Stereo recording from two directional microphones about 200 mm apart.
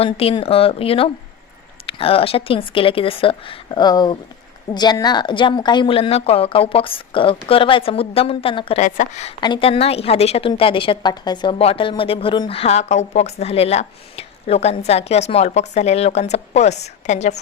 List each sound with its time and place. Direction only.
0.0 s a woman's voice: 30° left (ahead or behind)
9.4 s a woman's voice: 25° left (ahead or behind)